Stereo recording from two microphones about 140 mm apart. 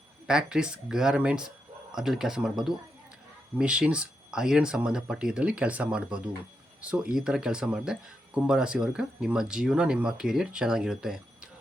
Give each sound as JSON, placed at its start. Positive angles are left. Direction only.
{"t": 0.3, "sound": "speech", "side_deg": -5}